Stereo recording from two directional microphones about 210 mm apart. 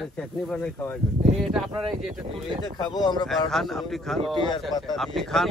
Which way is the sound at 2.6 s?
20° left (ahead or behind).